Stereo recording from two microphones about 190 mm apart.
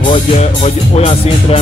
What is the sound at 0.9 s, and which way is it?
Music, 30° left (ahead or behind).